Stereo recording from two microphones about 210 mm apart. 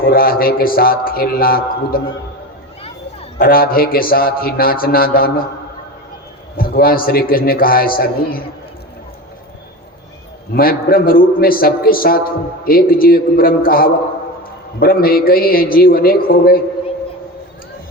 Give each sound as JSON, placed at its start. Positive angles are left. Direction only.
{"t": 0.0, "sound": "a man's voice", "side_deg": 45}
{"t": 3.3, "sound": "a man's voice", "side_deg": 45}
{"t": 6.6, "sound": "a man's voice", "side_deg": 45}
{"t": 10.5, "sound": "a man's voice", "side_deg": 45}